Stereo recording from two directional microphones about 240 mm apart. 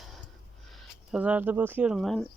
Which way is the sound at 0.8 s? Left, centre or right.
Centre.